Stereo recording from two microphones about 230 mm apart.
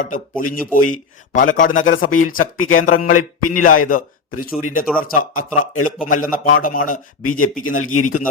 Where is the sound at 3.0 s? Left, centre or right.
Left.